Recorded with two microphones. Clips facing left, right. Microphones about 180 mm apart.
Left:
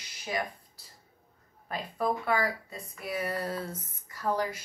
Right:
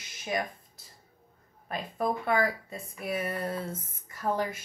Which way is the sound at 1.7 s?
20° right (ahead or behind).